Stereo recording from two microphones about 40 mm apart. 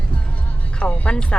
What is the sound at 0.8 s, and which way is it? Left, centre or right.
Speech, left.